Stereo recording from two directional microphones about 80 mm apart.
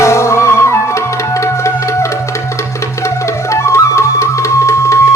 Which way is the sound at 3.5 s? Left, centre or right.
Left.